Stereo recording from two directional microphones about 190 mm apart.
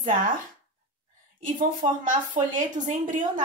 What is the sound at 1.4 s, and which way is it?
A woman's voice, 45° right (ahead or behind).